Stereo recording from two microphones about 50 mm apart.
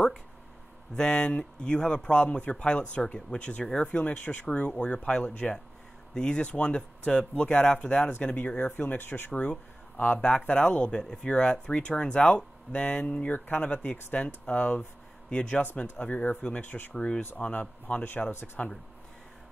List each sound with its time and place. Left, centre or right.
0.9 s speech: centre; by 9.3 s left
9.3 s speech: left